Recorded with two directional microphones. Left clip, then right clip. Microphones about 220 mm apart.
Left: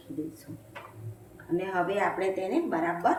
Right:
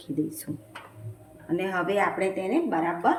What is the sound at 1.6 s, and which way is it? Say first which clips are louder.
Speech: right 3 dB; 30° right (ahead or behind).